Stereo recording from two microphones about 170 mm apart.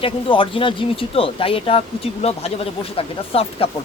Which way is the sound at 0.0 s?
30° left (ahead or behind).